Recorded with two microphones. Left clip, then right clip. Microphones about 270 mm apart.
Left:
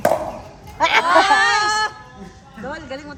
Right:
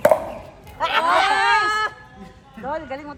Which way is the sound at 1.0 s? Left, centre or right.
Right.